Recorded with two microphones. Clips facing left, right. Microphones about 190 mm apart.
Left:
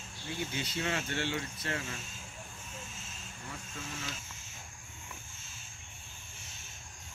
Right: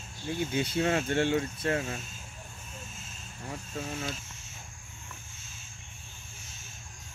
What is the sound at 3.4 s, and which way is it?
Speech, 35° right (ahead or behind).